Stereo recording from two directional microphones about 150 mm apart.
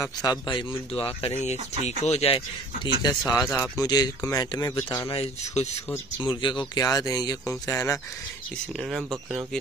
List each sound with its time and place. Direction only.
0.0 s speech: 25° left (ahead or behind)
5.1 s speech: 45° left (ahead or behind)
6.2 s speech: 30° left (ahead or behind)